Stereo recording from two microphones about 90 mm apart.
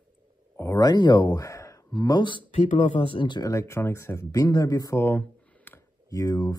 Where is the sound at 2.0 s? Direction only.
55° left (ahead or behind); by 3.3 s 70° left (ahead or behind).